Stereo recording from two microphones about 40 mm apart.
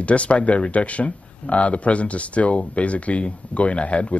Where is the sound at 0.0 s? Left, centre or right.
Left.